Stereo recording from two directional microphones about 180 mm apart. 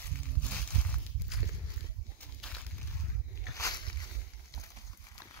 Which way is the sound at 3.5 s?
20° left (ahead or behind).